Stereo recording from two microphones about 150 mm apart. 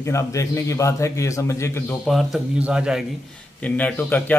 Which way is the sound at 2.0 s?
Centre (ahead or behind).